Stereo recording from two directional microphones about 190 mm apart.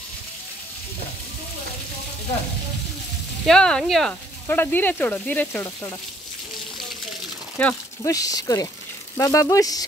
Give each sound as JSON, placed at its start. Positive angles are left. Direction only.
{"t": 3.4, "sound": "speech", "side_deg": 5}
{"t": 7.5, "sound": "speech", "side_deg": 10}